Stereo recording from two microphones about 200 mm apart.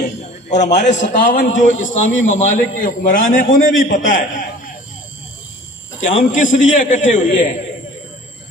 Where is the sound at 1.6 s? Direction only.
75° left (ahead or behind).